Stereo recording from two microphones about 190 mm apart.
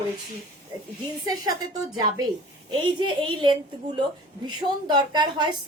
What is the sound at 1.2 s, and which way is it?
A woman's voice, 20° right (ahead or behind).